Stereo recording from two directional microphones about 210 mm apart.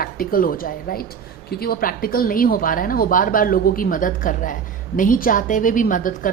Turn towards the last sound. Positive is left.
turn(degrees=40)  # may be behind; listen again after turning